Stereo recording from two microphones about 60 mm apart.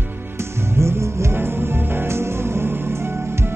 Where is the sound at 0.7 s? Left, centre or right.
Right.